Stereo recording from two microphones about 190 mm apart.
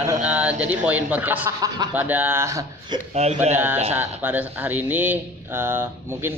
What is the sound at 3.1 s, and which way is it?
Speech, 35° right (ahead or behind).